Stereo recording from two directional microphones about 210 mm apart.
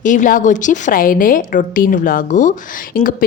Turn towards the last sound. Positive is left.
turn(degrees=40)  # may be behind; listen again after turning